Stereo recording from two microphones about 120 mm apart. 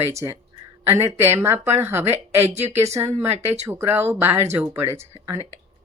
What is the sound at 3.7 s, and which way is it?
Speech, 20° right (ahead or behind).